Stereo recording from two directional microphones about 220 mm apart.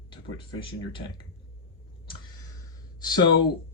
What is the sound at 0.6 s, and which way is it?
Speech, 20° left (ahead or behind).